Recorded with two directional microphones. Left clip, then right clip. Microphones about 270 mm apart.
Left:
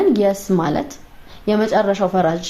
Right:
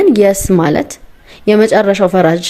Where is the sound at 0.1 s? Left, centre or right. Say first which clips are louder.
Right 7 dB; right.